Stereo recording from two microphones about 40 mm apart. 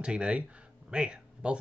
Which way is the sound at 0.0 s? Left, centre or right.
Right.